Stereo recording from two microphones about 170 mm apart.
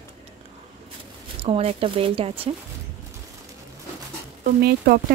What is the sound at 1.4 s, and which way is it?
Speech, 35° right (ahead or behind).